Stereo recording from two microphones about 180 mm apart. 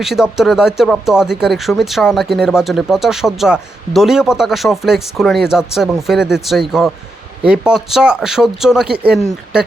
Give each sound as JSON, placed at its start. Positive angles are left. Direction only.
{"t": 0.0, "sound": "speech", "side_deg": 0}